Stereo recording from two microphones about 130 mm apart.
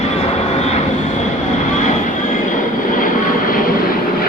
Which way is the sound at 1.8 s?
65° left (ahead or behind).